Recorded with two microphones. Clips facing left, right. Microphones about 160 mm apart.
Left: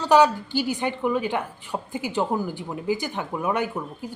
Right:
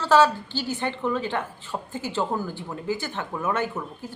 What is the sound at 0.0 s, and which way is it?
A woman's voice, 15° left (ahead or behind).